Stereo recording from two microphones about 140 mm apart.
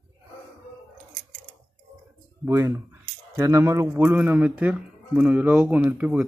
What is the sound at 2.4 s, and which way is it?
Speech, 20° right (ahead or behind).